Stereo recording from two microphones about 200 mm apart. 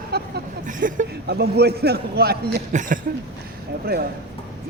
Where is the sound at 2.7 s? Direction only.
40° right (ahead or behind).